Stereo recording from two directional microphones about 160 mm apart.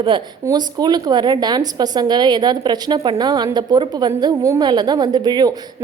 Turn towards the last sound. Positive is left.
turn(degrees=-25)  # may be behind; listen again after turning